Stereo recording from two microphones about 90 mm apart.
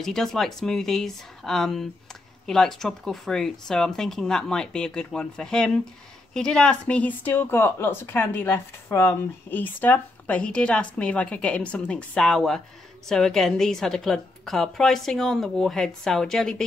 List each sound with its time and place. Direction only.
0.0 s a woman's voice: 5° left (ahead or behind)